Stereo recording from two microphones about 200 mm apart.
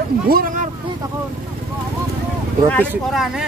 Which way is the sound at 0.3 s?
45° right (ahead or behind).